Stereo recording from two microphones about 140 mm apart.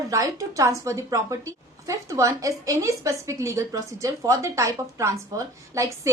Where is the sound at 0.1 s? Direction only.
25° right (ahead or behind).